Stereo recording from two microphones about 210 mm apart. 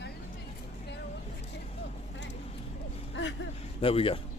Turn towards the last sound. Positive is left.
turn(degrees=25)  # may be behind; listen again after turning